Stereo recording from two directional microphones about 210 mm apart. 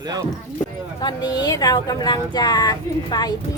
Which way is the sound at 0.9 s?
20° left (ahead or behind).